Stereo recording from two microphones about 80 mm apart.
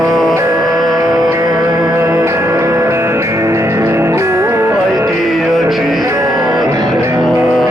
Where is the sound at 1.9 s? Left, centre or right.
Right.